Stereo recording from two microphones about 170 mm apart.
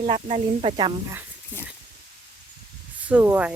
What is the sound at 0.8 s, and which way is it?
Speech, 25° right (ahead or behind).